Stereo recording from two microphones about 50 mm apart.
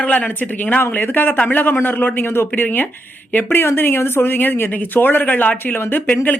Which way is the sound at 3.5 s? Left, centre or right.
Left.